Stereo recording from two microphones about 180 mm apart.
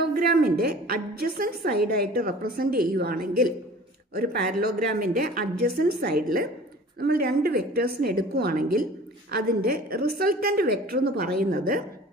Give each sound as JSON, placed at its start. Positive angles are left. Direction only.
{"t": 0.1, "sound": "a woman's voice", "side_deg": -55}